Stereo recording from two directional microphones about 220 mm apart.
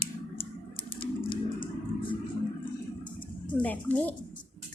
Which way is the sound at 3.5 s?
5° left (ahead or behind).